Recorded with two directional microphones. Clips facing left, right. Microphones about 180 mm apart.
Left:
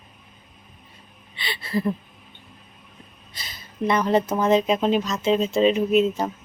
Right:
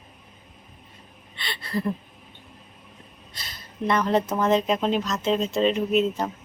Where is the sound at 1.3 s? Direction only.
5° left (ahead or behind).